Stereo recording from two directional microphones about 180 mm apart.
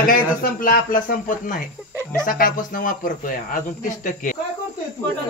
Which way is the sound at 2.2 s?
50° left (ahead or behind).